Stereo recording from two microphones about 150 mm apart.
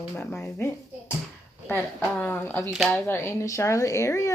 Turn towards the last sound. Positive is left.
turn(degrees=20)  # may be behind; listen again after turning